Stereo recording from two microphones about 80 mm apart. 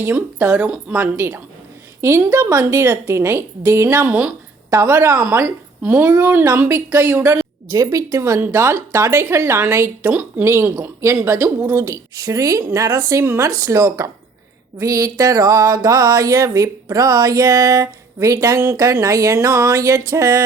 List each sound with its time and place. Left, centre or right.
0.0 s speech: right
0.9 s speech: right
7.7 s music: right
8.4 s speech: right
10.1 s speech: right
10.4 s speech: right
14.8 s music: right